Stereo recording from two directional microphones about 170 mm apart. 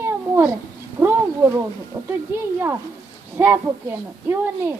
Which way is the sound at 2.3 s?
15° right (ahead or behind).